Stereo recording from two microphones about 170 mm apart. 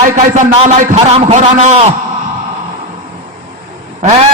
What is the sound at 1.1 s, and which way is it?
Speech, 35° right (ahead or behind).